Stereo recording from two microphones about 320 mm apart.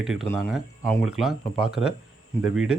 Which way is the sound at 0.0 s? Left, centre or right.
Centre.